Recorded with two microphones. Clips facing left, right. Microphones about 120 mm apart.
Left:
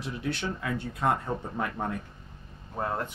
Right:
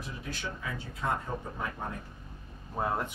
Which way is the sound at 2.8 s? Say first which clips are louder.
Even; 10° right (ahead or behind).